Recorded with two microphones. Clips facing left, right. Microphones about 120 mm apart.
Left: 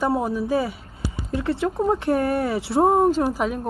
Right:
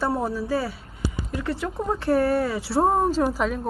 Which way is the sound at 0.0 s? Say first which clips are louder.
Left 3 dB; 15° left (ahead or behind).